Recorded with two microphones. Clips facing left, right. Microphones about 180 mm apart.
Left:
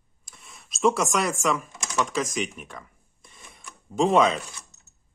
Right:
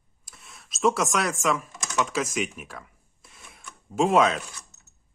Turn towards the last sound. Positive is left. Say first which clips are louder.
# left 1 dB
turn(degrees=0)  # may be behind; listen again after turning